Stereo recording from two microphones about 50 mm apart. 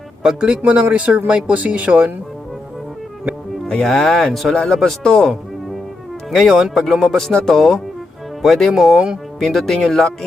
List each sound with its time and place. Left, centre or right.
0.2 s speech: centre
0.6 s speech: right
3.7 s a man's voice: centre
4.2 s a man's voice: centre
6.3 s a man's voice: centre
6.6 s speech: centre
7.0 s a man's voice: centre
8.7 s speech: centre
9.4 s a man's voice: centre